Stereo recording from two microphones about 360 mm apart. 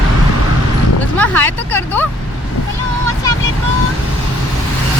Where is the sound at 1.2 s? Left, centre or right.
Centre.